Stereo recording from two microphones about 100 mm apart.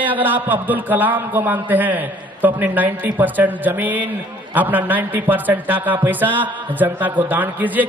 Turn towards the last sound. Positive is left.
turn(degrees=-15)  # may be behind; listen again after turning